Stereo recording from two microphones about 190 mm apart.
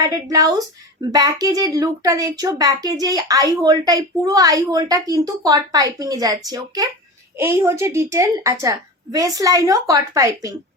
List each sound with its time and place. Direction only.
0.0 s a woman's voice: 20° right (ahead or behind)